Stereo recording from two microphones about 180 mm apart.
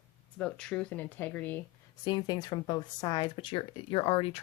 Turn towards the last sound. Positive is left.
turn(degrees=30)  # may be behind; listen again after turning